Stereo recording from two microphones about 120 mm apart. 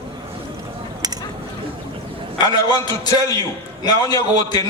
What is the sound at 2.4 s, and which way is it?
A man's voice, 35° left (ahead or behind).